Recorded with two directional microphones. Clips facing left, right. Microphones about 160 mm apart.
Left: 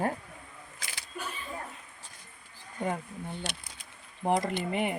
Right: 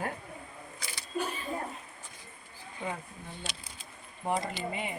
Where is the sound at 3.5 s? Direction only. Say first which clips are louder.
Left 2 dB; 60° left (ahead or behind).